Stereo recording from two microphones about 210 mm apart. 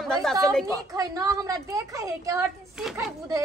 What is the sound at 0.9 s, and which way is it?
A woman's voice, 15° right (ahead or behind).